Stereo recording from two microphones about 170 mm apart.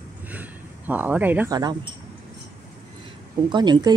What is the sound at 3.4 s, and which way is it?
Speech, 25° right (ahead or behind).